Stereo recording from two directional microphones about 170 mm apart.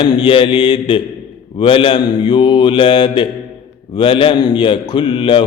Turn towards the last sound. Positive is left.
turn(degrees=30)  # may be behind; listen again after turning